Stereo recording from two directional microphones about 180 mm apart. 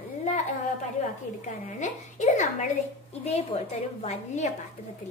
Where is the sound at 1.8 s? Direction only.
45° left (ahead or behind).